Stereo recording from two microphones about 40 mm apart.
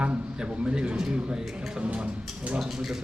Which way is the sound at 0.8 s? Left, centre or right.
Right.